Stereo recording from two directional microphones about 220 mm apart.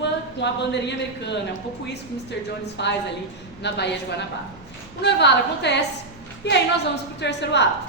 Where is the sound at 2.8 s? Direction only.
55° left (ahead or behind).